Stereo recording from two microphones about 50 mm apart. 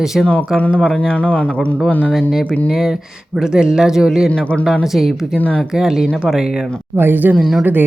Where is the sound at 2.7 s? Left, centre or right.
Centre.